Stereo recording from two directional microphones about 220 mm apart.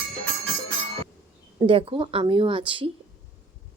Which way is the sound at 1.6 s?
25° right (ahead or behind).